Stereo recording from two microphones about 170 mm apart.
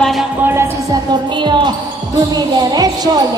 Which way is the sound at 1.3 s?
25° right (ahead or behind).